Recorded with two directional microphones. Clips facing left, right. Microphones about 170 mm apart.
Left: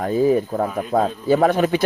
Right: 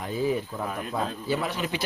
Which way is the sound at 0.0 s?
45° left (ahead or behind).